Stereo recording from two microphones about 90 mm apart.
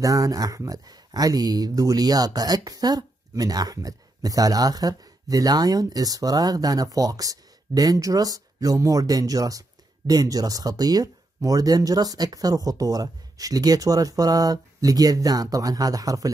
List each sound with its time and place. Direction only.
0.0 s speech: 40° right (ahead or behind)